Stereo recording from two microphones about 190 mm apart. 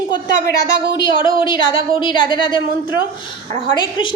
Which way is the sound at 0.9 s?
25° left (ahead or behind).